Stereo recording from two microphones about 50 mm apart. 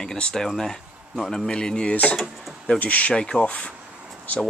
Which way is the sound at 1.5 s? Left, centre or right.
Centre.